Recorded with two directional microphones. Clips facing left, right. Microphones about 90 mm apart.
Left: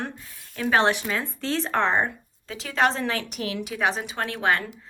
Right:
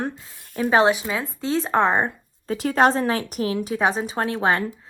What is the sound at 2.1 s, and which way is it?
A woman's voice, 45° right (ahead or behind).